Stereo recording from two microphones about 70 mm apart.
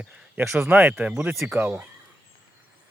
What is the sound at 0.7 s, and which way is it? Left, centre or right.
Speech, right.